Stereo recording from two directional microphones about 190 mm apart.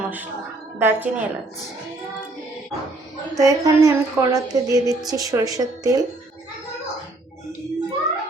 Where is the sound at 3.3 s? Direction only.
15° right (ahead or behind).